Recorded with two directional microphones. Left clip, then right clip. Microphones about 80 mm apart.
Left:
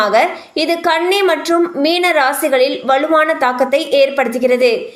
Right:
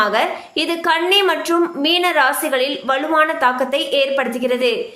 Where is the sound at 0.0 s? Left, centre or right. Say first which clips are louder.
Left 4 dB; left.